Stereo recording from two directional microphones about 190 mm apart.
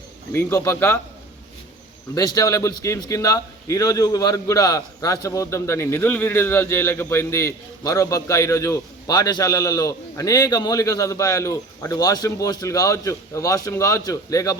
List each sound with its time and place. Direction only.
0.3 s a man's voice: 15° left (ahead or behind)
2.1 s a man's voice: 20° left (ahead or behind)